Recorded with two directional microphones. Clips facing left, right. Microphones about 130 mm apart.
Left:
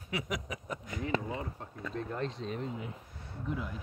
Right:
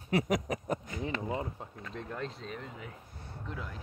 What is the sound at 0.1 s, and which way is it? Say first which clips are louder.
Speech: right 7 dB; 40° right (ahead or behind).